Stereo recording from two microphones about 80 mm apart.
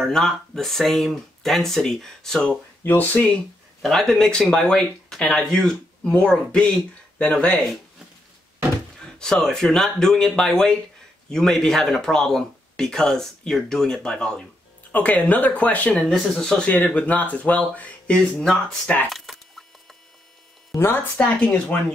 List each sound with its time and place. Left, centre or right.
0.0 s speech: centre
2.8 s speech: left
3.3 s speech: centre
9.0 s speech: centre
19.0 s a sound: centre
20.7 s speech: left
21.2 s speech: centre